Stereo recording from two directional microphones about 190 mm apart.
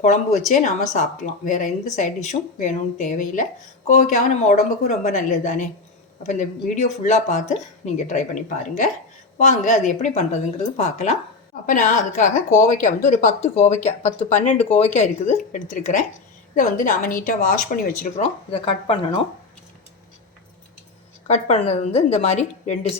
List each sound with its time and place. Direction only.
0.0 s a woman's voice: 40° left (ahead or behind)
18.2 s speech: 30° left (ahead or behind)
21.2 s speech: 35° left (ahead or behind)